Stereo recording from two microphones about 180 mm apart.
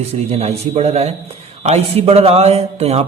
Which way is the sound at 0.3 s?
35° right (ahead or behind).